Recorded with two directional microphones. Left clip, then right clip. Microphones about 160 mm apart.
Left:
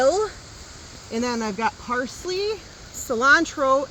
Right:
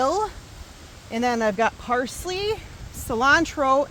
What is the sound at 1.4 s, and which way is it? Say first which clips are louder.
Speech: right 3 dB; 85° right.